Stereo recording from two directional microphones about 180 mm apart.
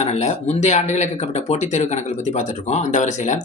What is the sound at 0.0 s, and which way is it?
Speech, 40° left (ahead or behind).